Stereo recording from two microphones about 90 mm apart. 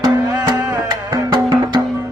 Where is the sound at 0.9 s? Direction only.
50° right (ahead or behind).